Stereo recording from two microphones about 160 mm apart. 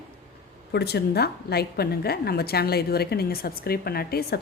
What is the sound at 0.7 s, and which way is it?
A woman's voice, 90° left.